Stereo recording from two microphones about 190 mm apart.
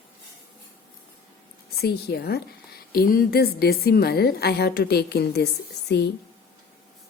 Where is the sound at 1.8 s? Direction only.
55° left (ahead or behind).